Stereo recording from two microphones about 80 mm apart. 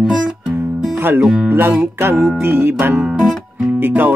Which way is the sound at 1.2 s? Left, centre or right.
Centre.